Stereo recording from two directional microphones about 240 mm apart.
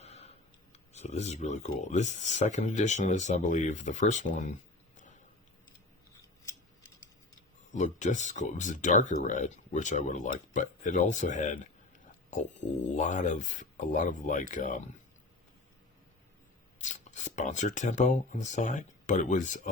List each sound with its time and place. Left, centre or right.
0.0 s speech: left
7.7 s speech: left
16.8 s speech: left